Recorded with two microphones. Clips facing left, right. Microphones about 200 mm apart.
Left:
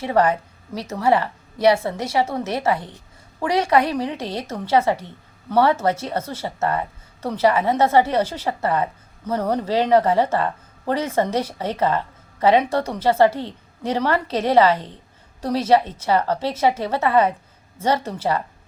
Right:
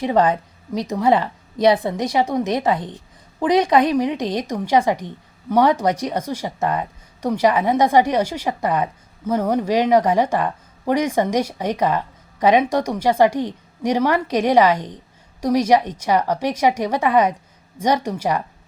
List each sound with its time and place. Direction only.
0.0 s a woman's voice: 20° right (ahead or behind)